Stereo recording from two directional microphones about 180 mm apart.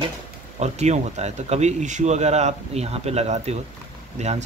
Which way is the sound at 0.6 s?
40° right (ahead or behind).